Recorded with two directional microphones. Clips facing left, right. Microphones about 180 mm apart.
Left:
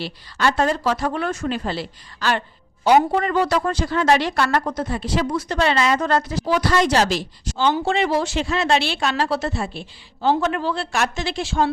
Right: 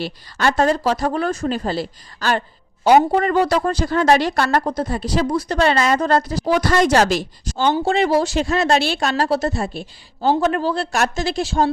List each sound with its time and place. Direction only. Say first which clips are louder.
0.0 s a woman's voice: right 2 dB; 45° right (ahead or behind)